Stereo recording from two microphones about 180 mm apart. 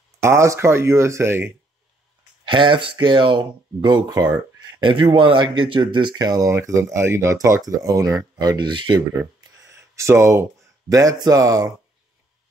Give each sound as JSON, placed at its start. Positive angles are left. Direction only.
{"t": 0.2, "sound": "speech", "side_deg": -15}
{"t": 2.4, "sound": "speech", "side_deg": -25}
{"t": 9.2, "sound": "a sound", "side_deg": -15}
{"t": 11.1, "sound": "speech", "side_deg": -20}